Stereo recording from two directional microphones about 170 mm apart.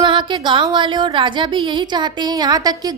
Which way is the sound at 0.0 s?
30° right (ahead or behind).